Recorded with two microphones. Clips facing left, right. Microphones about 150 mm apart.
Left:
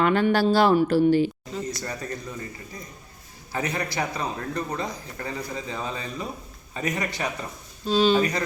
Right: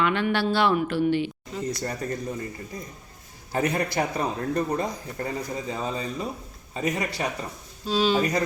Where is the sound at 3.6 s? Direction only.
50° right (ahead or behind).